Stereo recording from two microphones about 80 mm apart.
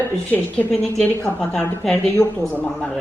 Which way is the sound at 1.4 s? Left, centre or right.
Centre.